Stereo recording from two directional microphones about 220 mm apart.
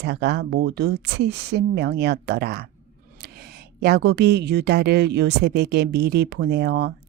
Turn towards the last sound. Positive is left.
turn(degrees=-50)  # may be behind; listen again after turning